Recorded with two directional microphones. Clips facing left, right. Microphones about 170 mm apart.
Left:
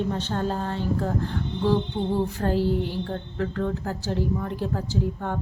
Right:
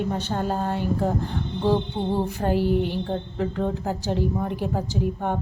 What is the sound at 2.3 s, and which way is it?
A woman's voice, 15° right (ahead or behind).